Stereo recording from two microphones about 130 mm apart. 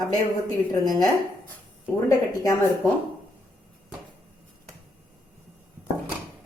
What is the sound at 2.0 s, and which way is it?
Speech, 25° left (ahead or behind).